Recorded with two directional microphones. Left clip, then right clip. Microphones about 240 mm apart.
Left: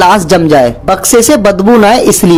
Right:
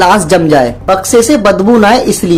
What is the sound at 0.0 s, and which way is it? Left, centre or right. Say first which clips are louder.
Speech: left 1 dB; left.